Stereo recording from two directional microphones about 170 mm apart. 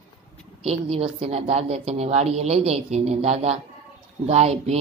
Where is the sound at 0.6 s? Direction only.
35° right (ahead or behind).